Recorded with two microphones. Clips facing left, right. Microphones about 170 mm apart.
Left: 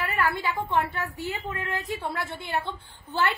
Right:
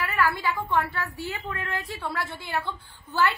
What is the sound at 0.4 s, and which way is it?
A child's voice, 20° left (ahead or behind).